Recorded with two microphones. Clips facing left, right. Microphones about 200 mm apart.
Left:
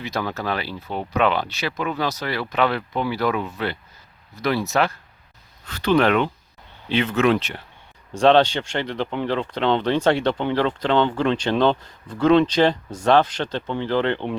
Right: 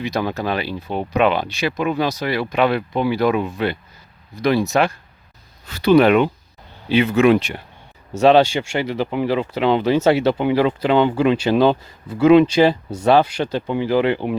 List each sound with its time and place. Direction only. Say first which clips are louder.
0.0 s speech: right 4 dB; 15° right (ahead or behind)